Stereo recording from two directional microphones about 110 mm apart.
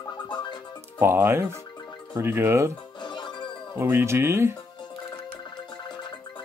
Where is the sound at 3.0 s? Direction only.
45° left (ahead or behind).